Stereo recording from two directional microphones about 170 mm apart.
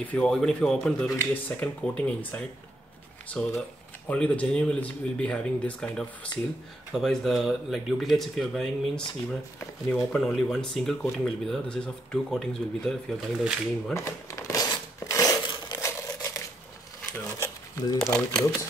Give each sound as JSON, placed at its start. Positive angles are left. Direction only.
{"t": 0.0, "sound": "speech", "side_deg": 5}
{"t": 13.9, "sound": "crumpling", "side_deg": 20}